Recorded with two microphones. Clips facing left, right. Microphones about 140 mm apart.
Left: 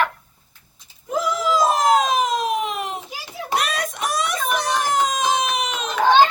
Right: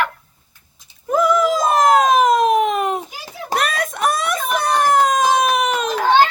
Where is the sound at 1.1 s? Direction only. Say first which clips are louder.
Right 5 dB; 50° right (ahead or behind).